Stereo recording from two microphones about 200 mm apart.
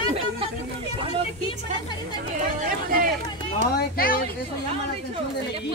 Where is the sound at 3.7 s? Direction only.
45° left (ahead or behind).